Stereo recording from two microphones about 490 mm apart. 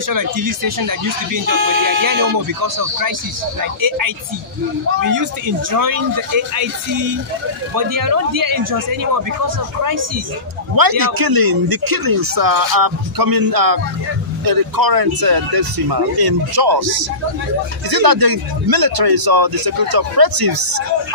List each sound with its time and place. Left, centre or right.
0.1 s speech: right
5.0 s speech: right
10.8 s speech: right